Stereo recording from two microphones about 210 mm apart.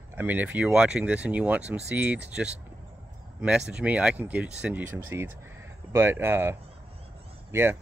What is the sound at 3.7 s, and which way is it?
Speech, 5° right (ahead or behind).